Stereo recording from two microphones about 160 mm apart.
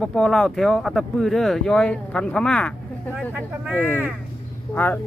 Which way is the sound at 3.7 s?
10° left (ahead or behind).